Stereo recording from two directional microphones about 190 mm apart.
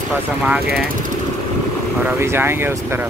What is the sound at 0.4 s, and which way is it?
Speech, 5° right (ahead or behind).